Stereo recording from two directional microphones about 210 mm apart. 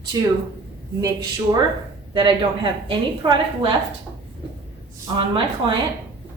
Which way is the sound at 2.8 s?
25° right (ahead or behind).